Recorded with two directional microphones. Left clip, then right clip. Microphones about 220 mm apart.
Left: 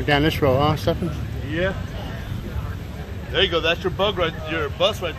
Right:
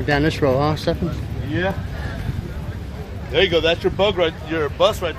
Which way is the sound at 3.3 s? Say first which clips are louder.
Right 3 dB; 35° right (ahead or behind).